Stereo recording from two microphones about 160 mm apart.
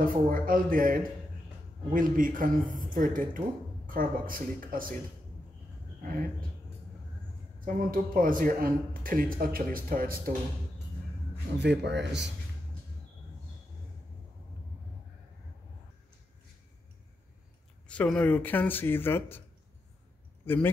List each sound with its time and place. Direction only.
0.0 s speech: 60° right (ahead or behind)
7.6 s speech: 60° right (ahead or behind)
11.5 s speech: 90° right
17.8 s speech: 5° left (ahead or behind)
20.4 s speech: 15° left (ahead or behind)